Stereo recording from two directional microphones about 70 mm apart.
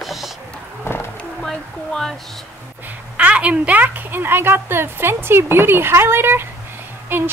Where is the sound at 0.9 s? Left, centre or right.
Left.